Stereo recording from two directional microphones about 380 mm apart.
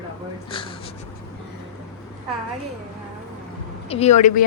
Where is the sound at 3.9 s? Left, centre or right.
Centre.